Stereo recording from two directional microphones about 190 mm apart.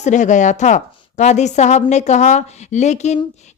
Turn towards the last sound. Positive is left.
turn(degrees=35)  # may be behind; listen again after turning